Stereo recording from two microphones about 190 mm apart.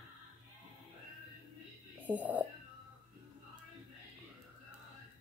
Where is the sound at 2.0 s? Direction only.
10° right (ahead or behind).